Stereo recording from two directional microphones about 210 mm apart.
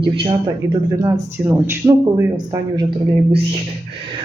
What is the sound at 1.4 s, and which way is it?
Speech, 10° right (ahead or behind).